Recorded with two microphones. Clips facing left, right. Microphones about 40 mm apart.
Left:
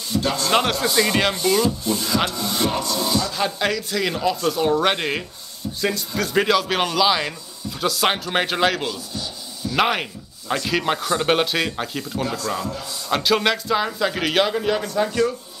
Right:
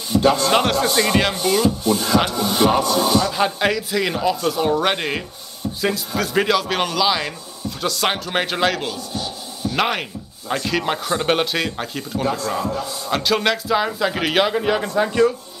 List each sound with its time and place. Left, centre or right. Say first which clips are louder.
0.1 s a man's voice: right 7 dB; right
0.5 s speech: right 2 dB; centre
2.3 s speech: right 6 dB; right; by 8.9 s centre
9.1 s a sound: right 3 dB; centre
9.8 s speech: left 1 dB; centre
12.3 s speech: right 7 dB; centre
13.1 s speech: even; centre